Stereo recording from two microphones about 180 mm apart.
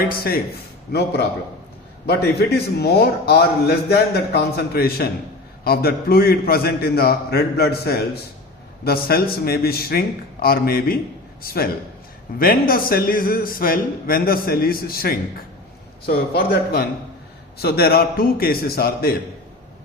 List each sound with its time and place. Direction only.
0.0 s a man's voice: 55° left (ahead or behind)
2.7 s a man's voice: 65° left (ahead or behind)